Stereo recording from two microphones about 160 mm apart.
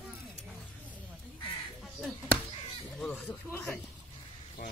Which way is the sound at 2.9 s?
10° left (ahead or behind).